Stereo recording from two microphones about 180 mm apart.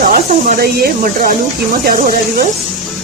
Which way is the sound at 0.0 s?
50° right (ahead or behind).